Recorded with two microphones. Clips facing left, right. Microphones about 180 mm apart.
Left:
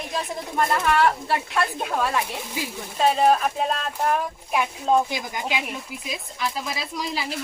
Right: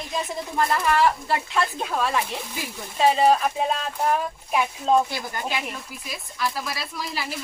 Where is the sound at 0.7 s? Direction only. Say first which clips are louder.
Even; centre (ahead or behind).